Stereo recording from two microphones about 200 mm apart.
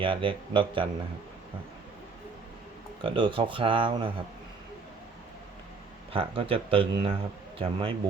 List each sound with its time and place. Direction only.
0.0 s speech: 25° right (ahead or behind)
3.0 s speech: 25° right (ahead or behind)
6.1 s speech: 25° right (ahead or behind)